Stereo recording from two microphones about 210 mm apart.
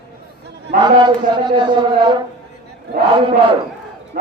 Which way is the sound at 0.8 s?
20° right (ahead or behind).